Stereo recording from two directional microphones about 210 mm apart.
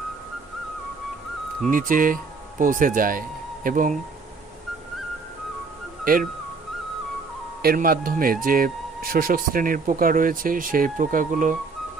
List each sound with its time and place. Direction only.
1.7 s speech: 40° right (ahead or behind)
7.6 s speech: 45° right (ahead or behind)